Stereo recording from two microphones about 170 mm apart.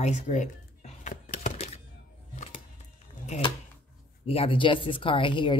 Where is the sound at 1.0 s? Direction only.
45° left (ahead or behind).